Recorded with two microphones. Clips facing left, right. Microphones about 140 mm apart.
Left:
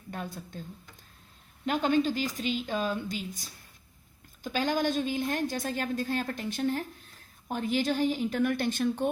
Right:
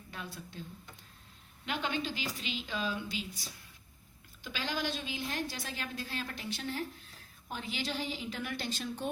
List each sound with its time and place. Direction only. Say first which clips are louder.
0.1 s a woman's voice: left 7 dB; 45° left (ahead or behind)
1.6 s a woman's voice: left 10 dB; 45° left (ahead or behind)